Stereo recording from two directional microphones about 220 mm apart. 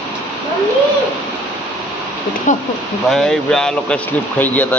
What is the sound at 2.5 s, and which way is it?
Speech, 35° left (ahead or behind).